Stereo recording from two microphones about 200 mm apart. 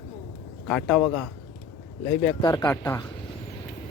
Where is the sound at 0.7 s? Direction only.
Centre (ahead or behind).